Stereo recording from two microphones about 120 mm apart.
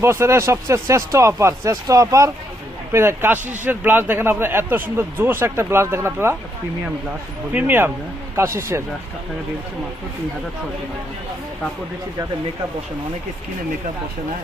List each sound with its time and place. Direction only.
0.0 s speech: 20° right (ahead or behind)
7.5 s speech: 15° right (ahead or behind)